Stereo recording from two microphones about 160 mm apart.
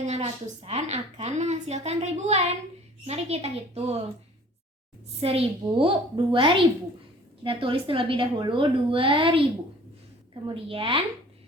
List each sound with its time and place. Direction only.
0.0 s a woman's voice: 45° right (ahead or behind)
5.2 s a woman's voice: 35° right (ahead or behind)
10.4 s a woman's voice: 35° right (ahead or behind)